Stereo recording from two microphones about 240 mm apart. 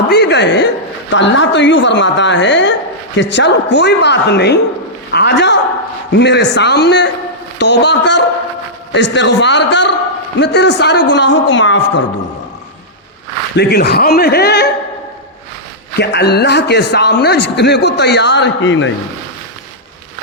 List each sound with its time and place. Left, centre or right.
0.1 s a man's voice: left
13.6 s speech: left
16.0 s a man's voice: left